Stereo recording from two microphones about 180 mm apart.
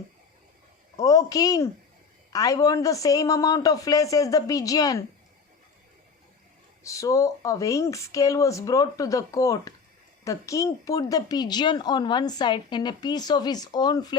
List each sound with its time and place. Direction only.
0.9 s a woman's voice: 20° left (ahead or behind)
6.8 s a woman's voice: 15° left (ahead or behind)